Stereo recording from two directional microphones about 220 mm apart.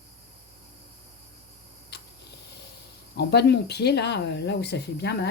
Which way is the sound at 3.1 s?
50° left (ahead or behind).